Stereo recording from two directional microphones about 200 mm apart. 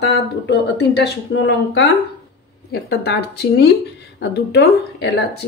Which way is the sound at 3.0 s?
55° left (ahead or behind).